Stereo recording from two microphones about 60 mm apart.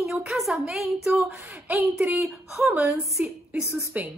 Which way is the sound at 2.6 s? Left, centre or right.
Right.